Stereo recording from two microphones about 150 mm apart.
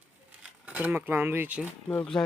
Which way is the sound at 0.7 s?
10° right (ahead or behind).